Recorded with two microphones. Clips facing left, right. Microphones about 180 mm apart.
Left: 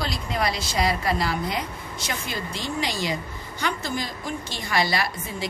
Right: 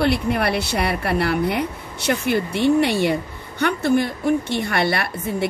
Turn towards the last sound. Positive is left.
turn(degrees=-60)  # may be behind; listen again after turning